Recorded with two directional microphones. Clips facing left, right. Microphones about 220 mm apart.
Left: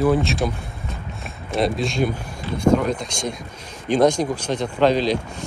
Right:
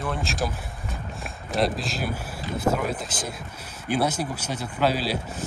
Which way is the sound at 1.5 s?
Centre (ahead or behind).